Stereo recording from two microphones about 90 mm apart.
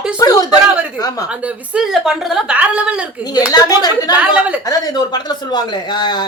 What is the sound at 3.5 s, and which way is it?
Speech, 45° left (ahead or behind).